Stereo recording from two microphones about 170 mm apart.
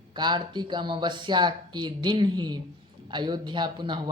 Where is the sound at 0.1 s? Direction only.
25° right (ahead or behind).